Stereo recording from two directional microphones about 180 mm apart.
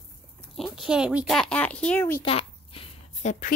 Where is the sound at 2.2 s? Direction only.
30° left (ahead or behind).